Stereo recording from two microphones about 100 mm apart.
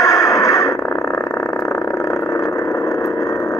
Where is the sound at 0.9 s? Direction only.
10° left (ahead or behind).